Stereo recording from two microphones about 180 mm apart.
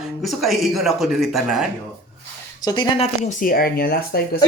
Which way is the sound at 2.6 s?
20° left (ahead or behind).